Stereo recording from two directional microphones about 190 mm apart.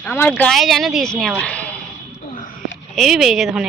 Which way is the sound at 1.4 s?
5° left (ahead or behind).